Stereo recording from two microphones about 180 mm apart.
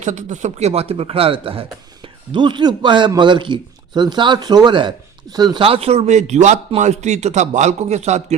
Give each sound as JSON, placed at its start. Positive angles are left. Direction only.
{"t": 0.0, "sound": "a man's voice", "side_deg": -40}